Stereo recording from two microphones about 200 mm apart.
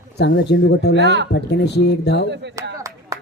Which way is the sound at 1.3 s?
55° left (ahead or behind).